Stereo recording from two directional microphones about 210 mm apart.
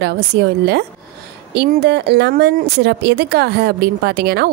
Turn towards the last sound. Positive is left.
turn(degrees=-50)  # may be behind; listen again after turning